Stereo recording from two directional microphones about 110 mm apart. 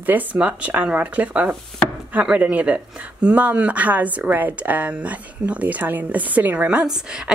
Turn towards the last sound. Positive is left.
turn(degrees=-5)  # may be behind; listen again after turning